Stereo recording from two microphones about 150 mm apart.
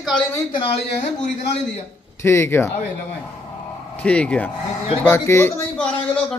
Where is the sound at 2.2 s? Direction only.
15° left (ahead or behind).